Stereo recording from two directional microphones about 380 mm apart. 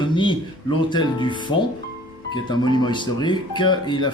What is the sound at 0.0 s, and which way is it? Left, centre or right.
Speech, centre.